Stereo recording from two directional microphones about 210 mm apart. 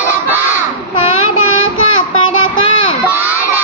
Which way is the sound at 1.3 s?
85° left.